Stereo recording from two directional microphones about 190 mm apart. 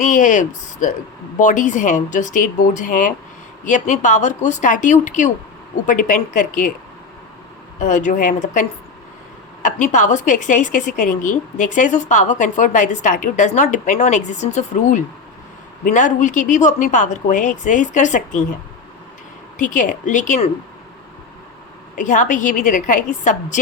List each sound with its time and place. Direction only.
0.0 s a woman's voice: 40° left (ahead or behind)
7.8 s a woman's voice: 40° left (ahead or behind)
9.6 s a woman's voice: 40° left (ahead or behind)
19.5 s speech: 45° left (ahead or behind)
21.9 s speech: 40° left (ahead or behind)